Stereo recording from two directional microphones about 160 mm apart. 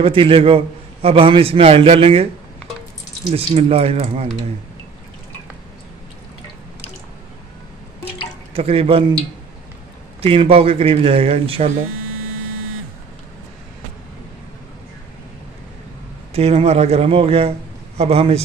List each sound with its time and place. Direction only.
0.0 s a man's voice: 35° right (ahead or behind)
3.3 s a man's voice: 40° right (ahead or behind)
8.5 s a man's voice: 35° right (ahead or behind)
10.2 s a man's voice: 35° right (ahead or behind)
16.3 s a man's voice: 40° right (ahead or behind)